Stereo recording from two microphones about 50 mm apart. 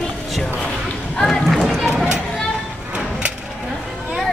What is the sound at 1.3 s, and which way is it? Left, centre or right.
Run, centre.